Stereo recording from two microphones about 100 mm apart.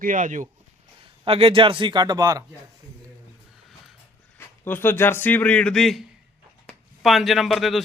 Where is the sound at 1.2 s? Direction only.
70° right (ahead or behind); by 2.4 s 35° right (ahead or behind).